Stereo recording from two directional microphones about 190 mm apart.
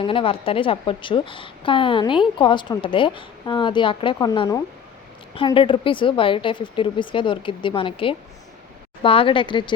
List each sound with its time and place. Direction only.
0.0 s a woman's voice: 25° left (ahead or behind)